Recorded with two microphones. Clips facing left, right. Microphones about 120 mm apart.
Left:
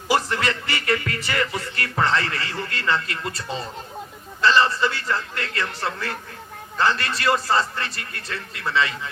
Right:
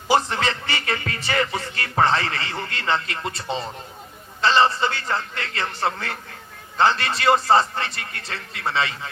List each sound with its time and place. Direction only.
0.1 s music: 30° right (ahead or behind)
4.4 s a man's voice: 30° right (ahead or behind)